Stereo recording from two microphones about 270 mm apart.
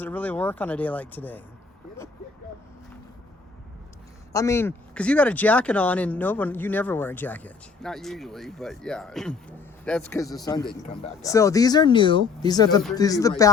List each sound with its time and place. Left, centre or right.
0.0 s speech: centre
4.3 s speech: centre